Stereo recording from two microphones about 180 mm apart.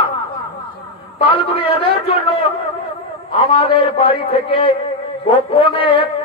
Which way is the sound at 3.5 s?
30° left (ahead or behind).